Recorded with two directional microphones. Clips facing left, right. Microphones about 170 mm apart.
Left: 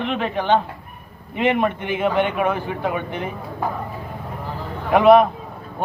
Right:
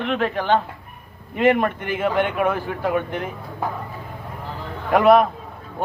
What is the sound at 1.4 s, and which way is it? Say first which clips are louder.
Speech: right 1 dB; centre (ahead or behind).